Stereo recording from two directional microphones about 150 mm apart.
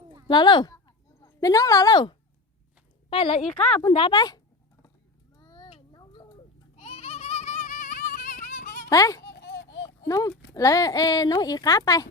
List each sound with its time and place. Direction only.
0.3 s speech: 30° left (ahead or behind)
3.5 s a woman's voice: 5° left (ahead or behind)
3.8 s speech: 30° left (ahead or behind)
5.4 s a sound: 25° left (ahead or behind)
5.9 s tick-tock: 30° left (ahead or behind)
6.7 s a sound: 45° left (ahead or behind); by 8.9 s 70° left (ahead or behind)
8.9 s speech: 25° left (ahead or behind)
9.2 s a sound: 90° left
10.1 s speech: 25° left (ahead or behind)